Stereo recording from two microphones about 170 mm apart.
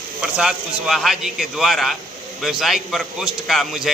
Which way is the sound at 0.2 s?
5° right (ahead or behind).